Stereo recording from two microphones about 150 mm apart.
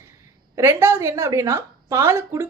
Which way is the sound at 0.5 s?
15° right (ahead or behind).